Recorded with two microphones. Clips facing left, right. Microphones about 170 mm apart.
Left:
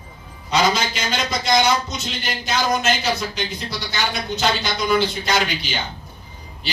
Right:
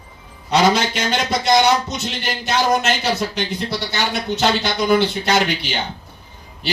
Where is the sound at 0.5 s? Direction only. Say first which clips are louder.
Right 4 dB; 65° right (ahead or behind).